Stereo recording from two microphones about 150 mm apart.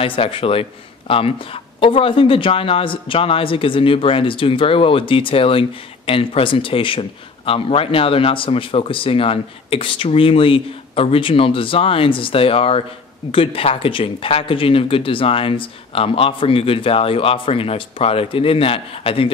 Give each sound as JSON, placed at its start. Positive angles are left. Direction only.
{"t": 0.0, "sound": "speech", "side_deg": 35}